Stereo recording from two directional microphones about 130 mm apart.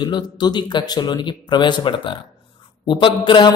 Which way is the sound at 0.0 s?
35° left (ahead or behind).